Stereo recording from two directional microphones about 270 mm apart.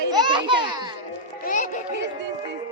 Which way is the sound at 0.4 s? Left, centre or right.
Centre.